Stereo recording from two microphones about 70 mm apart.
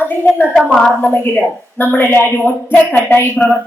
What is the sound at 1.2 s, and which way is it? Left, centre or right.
A woman's voice, left.